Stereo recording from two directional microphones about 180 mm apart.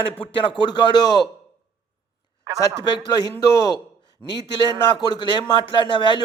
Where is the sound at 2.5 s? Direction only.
25° right (ahead or behind).